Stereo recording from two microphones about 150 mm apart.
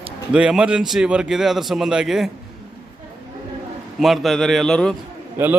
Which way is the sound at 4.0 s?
Centre (ahead or behind).